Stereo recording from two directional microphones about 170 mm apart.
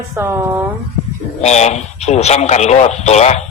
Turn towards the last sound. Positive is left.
turn(degrees=40)  # may be behind; listen again after turning